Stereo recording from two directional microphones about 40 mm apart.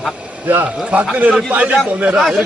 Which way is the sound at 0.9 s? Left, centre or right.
Right.